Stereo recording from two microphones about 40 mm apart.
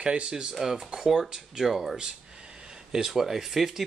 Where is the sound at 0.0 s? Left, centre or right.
Right.